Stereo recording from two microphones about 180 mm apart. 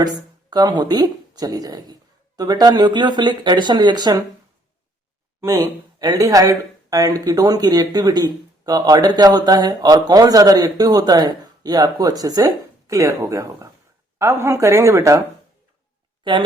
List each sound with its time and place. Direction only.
0.5 s speech: 25° right (ahead or behind)
5.4 s a woman's voice: 15° right (ahead or behind)